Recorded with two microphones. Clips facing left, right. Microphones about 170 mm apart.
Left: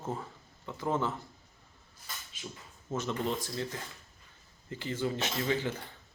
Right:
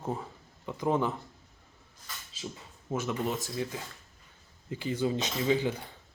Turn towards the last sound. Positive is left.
turn(degrees=-15)  # may be behind; listen again after turning